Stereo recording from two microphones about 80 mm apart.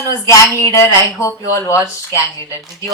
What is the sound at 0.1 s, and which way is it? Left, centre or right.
Speech, left.